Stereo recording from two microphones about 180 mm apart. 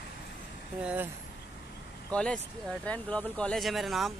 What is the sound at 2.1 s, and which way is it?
Speech, 5° left (ahead or behind).